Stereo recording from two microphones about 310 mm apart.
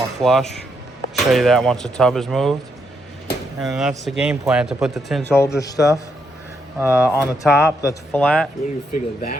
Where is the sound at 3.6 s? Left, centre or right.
Centre.